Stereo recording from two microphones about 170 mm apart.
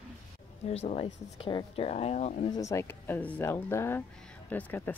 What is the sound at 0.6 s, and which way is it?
Speech, 40° left (ahead or behind).